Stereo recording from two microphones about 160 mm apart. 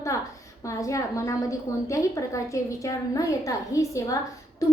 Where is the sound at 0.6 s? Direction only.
20° left (ahead or behind).